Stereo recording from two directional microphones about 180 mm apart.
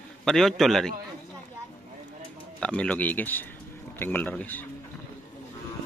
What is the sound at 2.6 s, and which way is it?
Speech, 5° left (ahead or behind).